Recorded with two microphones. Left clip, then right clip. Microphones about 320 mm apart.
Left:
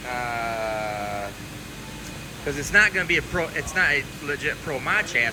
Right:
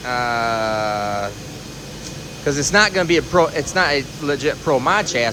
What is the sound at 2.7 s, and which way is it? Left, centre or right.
Speech, centre.